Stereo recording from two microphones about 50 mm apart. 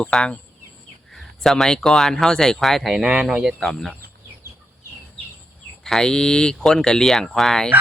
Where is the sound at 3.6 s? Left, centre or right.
Centre.